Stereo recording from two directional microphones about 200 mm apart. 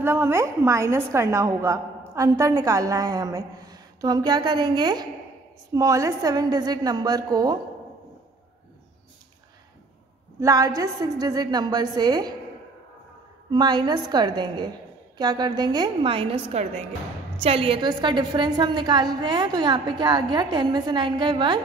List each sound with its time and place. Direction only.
0.0 s a woman's voice: 10° right (ahead or behind)
10.4 s a woman's voice: 15° right (ahead or behind)
13.5 s a woman's voice: 20° right (ahead or behind)